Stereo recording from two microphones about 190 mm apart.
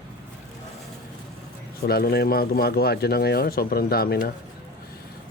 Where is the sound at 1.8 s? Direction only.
55° left (ahead or behind).